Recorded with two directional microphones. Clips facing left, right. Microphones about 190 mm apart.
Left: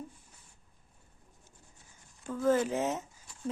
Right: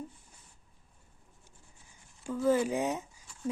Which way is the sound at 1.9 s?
10° right (ahead or behind).